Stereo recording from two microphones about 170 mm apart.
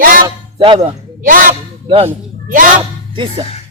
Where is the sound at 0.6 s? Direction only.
30° right (ahead or behind).